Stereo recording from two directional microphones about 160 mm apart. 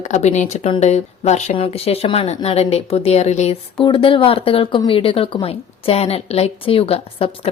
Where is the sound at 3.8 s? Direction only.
30° left (ahead or behind).